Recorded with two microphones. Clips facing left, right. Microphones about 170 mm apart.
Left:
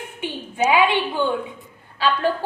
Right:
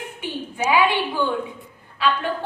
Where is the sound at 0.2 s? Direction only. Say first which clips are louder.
Left 4 dB; 20° left (ahead or behind).